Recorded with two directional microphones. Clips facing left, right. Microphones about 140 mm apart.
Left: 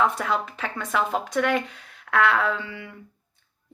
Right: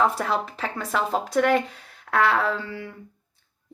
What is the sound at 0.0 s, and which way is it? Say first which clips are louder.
Speech: right 1 dB; 35° right (ahead or behind).